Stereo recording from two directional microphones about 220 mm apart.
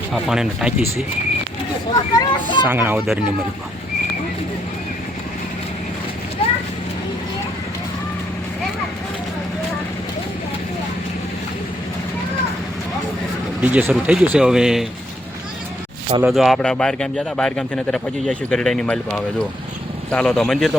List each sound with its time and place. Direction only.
0.1 s speech: centre (ahead or behind)
1.9 s speech: 20° left (ahead or behind)
2.6 s speech: 10° right (ahead or behind)
13.6 s speech: 5° right (ahead or behind)
16.2 s speech: centre (ahead or behind)